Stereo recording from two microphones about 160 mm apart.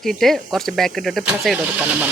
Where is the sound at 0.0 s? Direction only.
Centre (ahead or behind).